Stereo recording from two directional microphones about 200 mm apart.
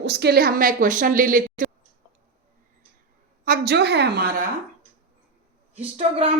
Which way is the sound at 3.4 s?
50° right (ahead or behind).